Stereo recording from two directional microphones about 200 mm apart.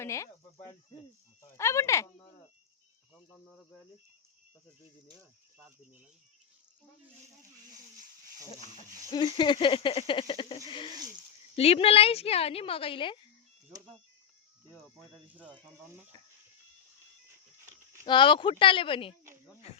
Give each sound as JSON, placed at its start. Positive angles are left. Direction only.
{"t": 0.0, "sound": "a woman's voice", "side_deg": 15}
{"t": 3.2, "sound": "cricket", "side_deg": 0}
{"t": 9.0, "sound": "a woman's voice", "side_deg": 20}
{"t": 14.9, "sound": "speech", "side_deg": -5}
{"t": 18.0, "sound": "a woman's voice", "side_deg": 25}